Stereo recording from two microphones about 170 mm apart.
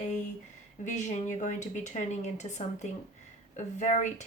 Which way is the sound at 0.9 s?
45° left (ahead or behind).